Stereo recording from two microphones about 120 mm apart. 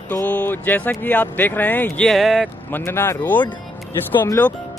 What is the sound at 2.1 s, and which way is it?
Speech, centre (ahead or behind).